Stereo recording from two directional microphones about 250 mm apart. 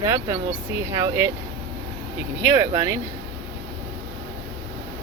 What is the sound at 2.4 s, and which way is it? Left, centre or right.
Speech, centre.